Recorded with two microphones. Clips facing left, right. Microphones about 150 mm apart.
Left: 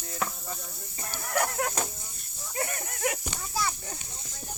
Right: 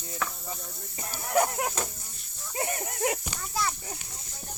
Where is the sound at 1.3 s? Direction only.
20° right (ahead or behind).